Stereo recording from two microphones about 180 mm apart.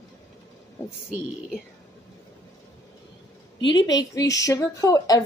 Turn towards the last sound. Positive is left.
turn(degrees=20)  # may be behind; listen again after turning